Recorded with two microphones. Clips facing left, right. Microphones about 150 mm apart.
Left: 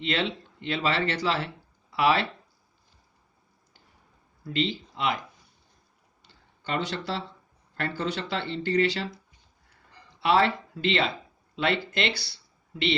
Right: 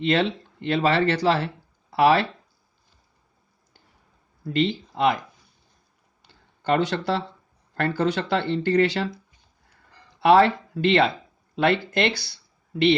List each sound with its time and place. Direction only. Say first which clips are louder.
0.0 s speech: right 7 dB; 45° right (ahead or behind)
4.4 s speech: right 5 dB; 50° right (ahead or behind)
6.2 s a sound: right 11 dB; 55° right (ahead or behind)
7.8 s speech: right 7 dB; 55° right (ahead or behind)
10.2 s speech: right 6 dB; 50° right (ahead or behind)